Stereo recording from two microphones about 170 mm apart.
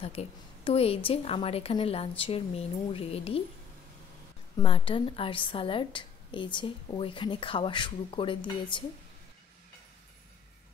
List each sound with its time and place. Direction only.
0.0 s a woman's voice: 35° left (ahead or behind)
4.6 s a woman's voice: 30° left (ahead or behind)